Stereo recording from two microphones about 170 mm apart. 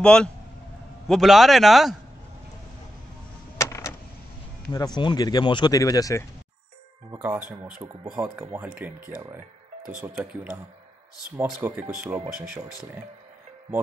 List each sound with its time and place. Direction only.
0.0 s a man's voice: 5° left (ahead or behind)
3.5 s vehicle: 15° left (ahead or behind)
4.6 s speech: 25° left (ahead or behind)
7.1 s speech: 10° right (ahead or behind)
11.3 s speech: 10° right (ahead or behind)